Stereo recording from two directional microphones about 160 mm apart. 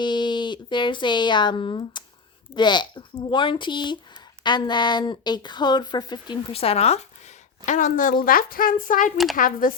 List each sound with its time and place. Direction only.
0.0 s speech: 30° left (ahead or behind); by 9.7 s 60° left (ahead or behind)